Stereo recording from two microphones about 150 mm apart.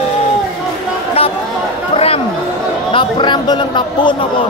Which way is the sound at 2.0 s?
40° left (ahead or behind).